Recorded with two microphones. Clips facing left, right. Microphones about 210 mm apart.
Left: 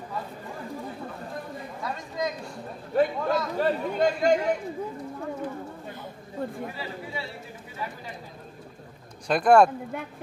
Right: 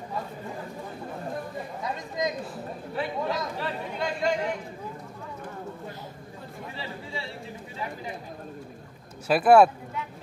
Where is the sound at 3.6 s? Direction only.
45° left (ahead or behind).